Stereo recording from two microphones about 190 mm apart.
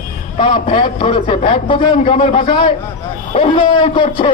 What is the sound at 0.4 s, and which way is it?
A man's voice, 25° left (ahead or behind).